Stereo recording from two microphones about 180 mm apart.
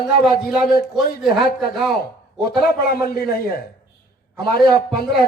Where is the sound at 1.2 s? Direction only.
Centre (ahead or behind).